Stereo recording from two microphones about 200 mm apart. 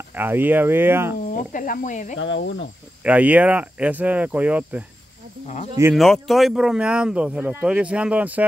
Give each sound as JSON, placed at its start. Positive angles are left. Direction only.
{"t": 0.1, "sound": "speech", "side_deg": -10}
{"t": 1.3, "sound": "speech", "side_deg": 40}
{"t": 2.1, "sound": "cricket", "side_deg": 70}
{"t": 3.0, "sound": "speech", "side_deg": -5}
{"t": 5.9, "sound": "speech", "side_deg": 0}